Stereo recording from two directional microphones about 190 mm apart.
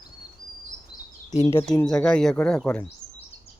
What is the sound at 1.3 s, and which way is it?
Speech, 35° left (ahead or behind).